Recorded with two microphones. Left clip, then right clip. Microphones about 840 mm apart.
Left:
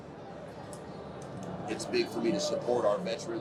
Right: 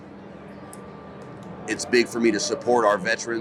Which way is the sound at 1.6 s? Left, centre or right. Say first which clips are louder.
Right 10 dB; right.